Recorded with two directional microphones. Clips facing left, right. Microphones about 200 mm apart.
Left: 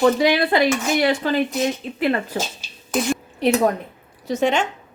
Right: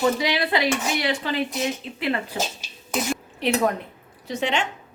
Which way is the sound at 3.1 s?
40° left (ahead or behind).